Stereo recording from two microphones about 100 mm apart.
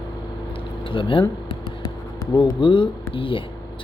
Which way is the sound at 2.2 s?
35° left (ahead or behind).